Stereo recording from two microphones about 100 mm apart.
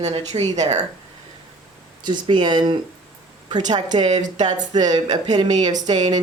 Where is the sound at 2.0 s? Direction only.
50° right (ahead or behind).